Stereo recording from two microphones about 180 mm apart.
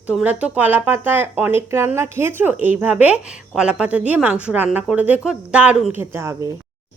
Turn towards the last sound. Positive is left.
turn(degrees=-15)  # may be behind; listen again after turning